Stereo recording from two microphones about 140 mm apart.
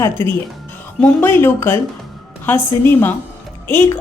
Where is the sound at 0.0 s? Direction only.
15° left (ahead or behind).